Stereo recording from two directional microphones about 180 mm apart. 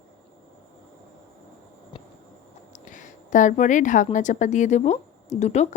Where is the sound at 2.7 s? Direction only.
45° left (ahead or behind).